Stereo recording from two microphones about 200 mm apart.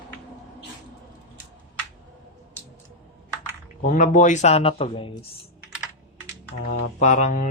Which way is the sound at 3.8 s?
40° left (ahead or behind).